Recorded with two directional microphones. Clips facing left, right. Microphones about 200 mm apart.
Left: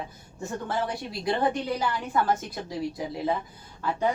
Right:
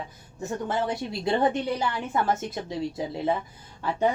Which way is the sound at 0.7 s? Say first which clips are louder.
Right 2 dB; 25° right (ahead or behind).